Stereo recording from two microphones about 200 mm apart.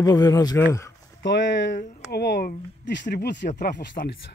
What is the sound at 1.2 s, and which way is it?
Speech, 65° left (ahead or behind).